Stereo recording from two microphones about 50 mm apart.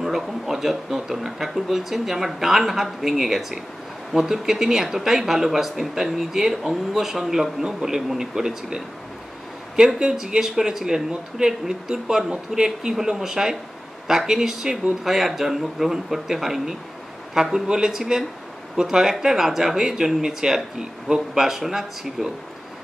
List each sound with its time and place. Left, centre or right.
0.0 s a man's voice: centre